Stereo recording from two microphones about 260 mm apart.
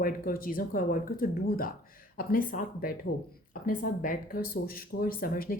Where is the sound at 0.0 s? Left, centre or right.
Left.